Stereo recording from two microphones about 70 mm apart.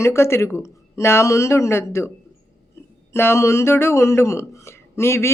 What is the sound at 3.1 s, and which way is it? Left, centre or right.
Speech, left.